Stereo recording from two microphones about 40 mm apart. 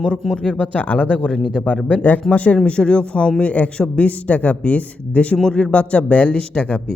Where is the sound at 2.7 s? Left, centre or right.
Left.